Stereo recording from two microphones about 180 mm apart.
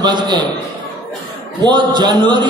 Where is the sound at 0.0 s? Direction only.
25° right (ahead or behind).